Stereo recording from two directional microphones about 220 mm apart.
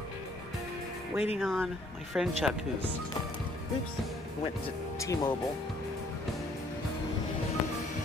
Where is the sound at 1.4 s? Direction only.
Centre (ahead or behind).